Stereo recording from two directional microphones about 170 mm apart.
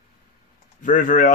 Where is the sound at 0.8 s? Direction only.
50° left (ahead or behind).